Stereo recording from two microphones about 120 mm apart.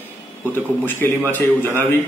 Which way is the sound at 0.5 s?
15° left (ahead or behind).